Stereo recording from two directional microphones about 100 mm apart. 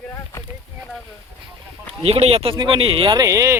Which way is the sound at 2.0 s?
75° right (ahead or behind).